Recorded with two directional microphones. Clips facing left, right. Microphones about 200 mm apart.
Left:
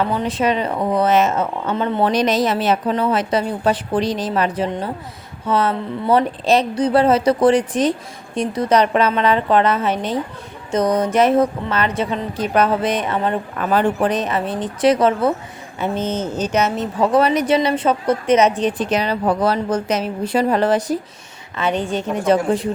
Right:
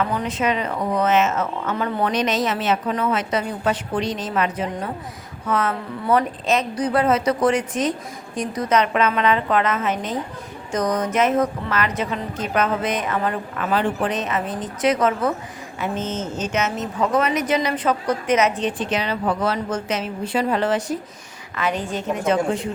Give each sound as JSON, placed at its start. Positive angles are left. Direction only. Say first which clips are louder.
{"t": 0.0, "sound": "speech", "louder": "left 3 dB", "side_deg": 30}
{"t": 13.7, "sound": "a woman's voice", "louder": "left 4 dB", "side_deg": 40}